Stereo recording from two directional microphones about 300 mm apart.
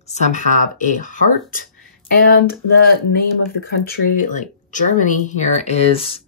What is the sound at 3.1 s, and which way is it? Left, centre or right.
Speech, left.